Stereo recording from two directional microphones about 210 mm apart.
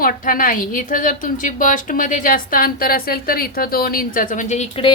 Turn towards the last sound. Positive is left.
turn(degrees=30)  # may be behind; listen again after turning